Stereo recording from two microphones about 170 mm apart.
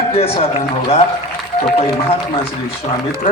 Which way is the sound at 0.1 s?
35° left (ahead or behind).